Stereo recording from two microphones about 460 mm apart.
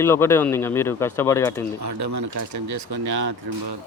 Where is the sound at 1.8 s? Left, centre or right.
Right.